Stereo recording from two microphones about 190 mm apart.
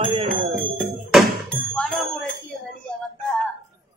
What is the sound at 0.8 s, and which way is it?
Music, 5° left (ahead or behind).